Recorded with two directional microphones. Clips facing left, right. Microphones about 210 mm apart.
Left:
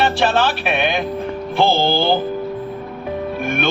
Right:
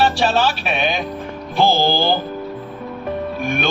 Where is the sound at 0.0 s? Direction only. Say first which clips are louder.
Even; 55° left (ahead or behind).